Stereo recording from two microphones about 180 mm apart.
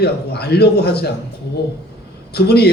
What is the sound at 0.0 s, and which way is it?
A man's voice, 65° left (ahead or behind).